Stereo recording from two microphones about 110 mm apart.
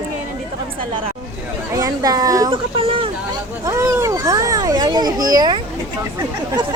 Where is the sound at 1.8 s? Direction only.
35° right (ahead or behind).